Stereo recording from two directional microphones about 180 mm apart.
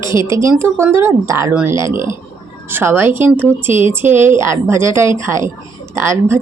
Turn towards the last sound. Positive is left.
turn(degrees=-15)  # may be behind; listen again after turning